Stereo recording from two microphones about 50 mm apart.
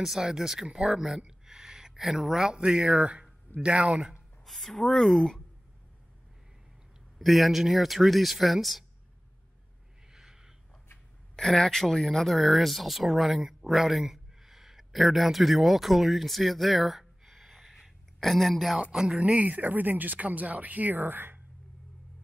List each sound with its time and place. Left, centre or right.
0.0 s speech: centre
4.5 s speech: centre
7.2 s speech: centre
10.1 s a sound: centre
11.3 s speech: centre
18.9 s speech: centre
19.3 s speech: right